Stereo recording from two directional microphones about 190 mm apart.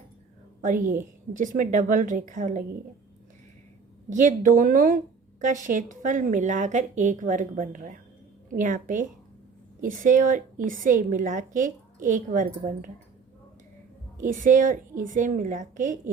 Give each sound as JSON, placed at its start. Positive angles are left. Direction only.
{"t": 0.6, "sound": "a woman's voice", "side_deg": -45}
{"t": 4.1, "sound": "a woman's voice", "side_deg": -40}
{"t": 14.2, "sound": "a woman's voice", "side_deg": -45}